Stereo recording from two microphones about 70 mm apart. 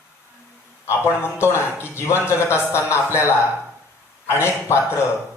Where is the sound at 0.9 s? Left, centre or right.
Left.